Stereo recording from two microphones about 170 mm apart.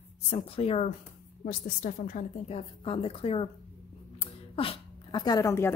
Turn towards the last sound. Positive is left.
turn(degrees=15)  # may be behind; listen again after turning